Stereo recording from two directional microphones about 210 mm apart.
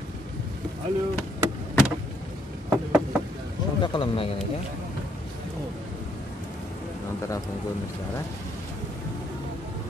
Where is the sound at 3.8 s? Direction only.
25° left (ahead or behind).